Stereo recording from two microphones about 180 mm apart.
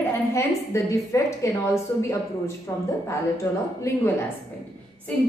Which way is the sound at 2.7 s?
15° left (ahead or behind).